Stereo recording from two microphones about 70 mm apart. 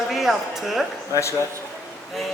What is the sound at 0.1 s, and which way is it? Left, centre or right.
Speech, centre.